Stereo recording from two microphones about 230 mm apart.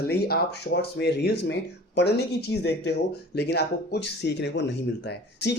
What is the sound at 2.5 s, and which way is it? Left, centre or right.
Speech, left.